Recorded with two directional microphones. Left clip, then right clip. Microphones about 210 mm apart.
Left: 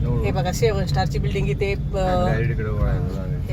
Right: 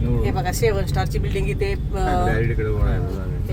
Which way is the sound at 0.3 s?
5° right (ahead or behind).